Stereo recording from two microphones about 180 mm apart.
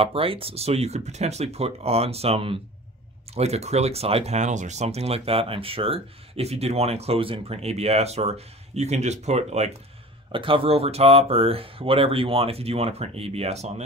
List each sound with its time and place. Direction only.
0.0 s speech: 30° right (ahead or behind)